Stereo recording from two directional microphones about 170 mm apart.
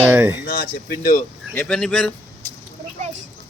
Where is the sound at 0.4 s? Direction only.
75° left (ahead or behind).